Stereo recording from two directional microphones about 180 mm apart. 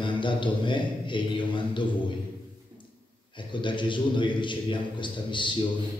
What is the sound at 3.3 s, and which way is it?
A man's voice, 25° left (ahead or behind).